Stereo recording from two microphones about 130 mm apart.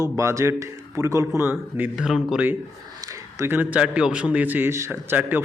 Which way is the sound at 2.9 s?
25° right (ahead or behind).